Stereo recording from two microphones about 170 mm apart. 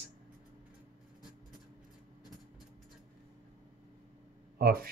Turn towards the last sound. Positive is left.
turn(degrees=-60)  # may be behind; listen again after turning